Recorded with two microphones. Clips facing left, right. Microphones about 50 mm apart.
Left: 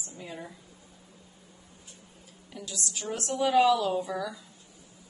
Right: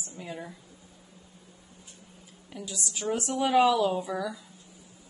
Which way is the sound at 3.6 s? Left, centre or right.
Centre.